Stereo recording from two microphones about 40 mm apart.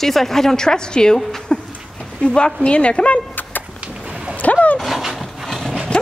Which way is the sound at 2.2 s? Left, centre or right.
Left.